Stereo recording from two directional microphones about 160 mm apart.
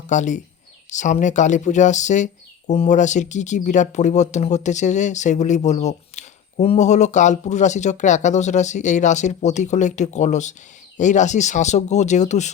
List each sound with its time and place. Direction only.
0.1 s speech: 50° left (ahead or behind)